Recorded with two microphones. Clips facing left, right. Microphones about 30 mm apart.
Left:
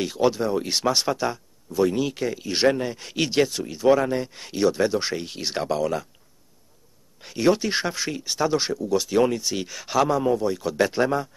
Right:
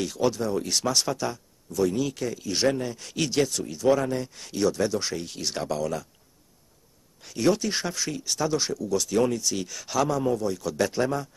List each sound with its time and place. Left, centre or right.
0.0 s speech: left
7.2 s speech: left